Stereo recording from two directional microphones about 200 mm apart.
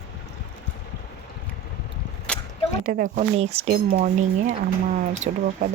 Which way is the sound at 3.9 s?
45° right (ahead or behind).